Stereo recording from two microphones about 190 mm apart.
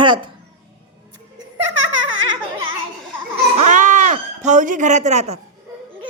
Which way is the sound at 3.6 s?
40° right (ahead or behind).